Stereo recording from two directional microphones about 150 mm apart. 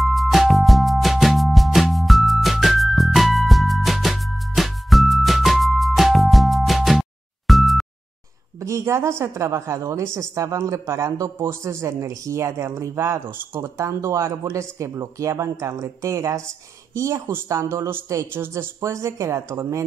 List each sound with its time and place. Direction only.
0.0 s music: centre (ahead or behind)
8.5 s a sound: 20° right (ahead or behind)
9.2 s speech: 20° right (ahead or behind)